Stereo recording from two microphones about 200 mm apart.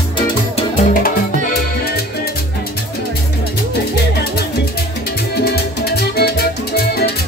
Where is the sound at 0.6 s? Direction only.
40° left (ahead or behind).